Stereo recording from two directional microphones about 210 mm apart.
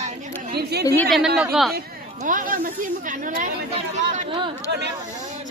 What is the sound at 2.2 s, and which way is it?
Speech, 40° right (ahead or behind).